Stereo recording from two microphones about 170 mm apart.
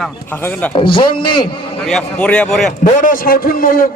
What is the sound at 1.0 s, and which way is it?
Speech, 30° left (ahead or behind).